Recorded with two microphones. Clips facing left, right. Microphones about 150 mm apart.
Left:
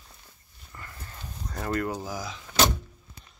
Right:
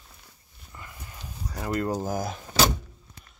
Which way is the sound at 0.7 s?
15° right (ahead or behind).